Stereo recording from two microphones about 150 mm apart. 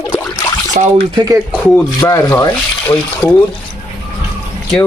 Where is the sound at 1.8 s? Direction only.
20° left (ahead or behind).